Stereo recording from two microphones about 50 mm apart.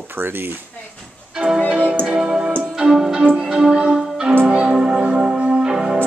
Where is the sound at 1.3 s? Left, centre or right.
Centre; by 2.0 s right.